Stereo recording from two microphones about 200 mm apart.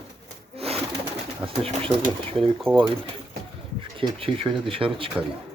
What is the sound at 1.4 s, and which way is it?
Speech, 30° right (ahead or behind).